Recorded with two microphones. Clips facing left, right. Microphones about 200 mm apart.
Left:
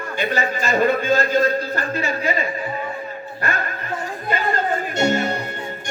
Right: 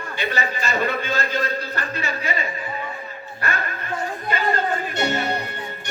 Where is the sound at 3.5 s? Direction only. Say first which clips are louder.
Left 1 dB; 40° left (ahead or behind).